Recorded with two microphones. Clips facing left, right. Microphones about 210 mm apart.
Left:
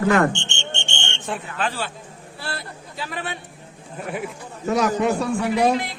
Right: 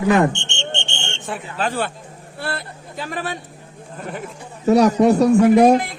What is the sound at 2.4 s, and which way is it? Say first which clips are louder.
Speech: right 5 dB; 55° right (ahead or behind).